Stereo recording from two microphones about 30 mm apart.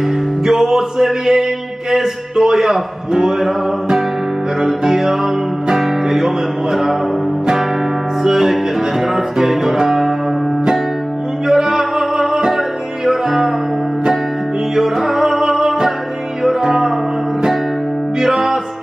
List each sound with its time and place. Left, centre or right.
0.5 s music: centre
3.1 s music: right
3.3 s music: centre
8.2 s music: centre
11.4 s music: centre
14.8 s music: centre
18.2 s music: centre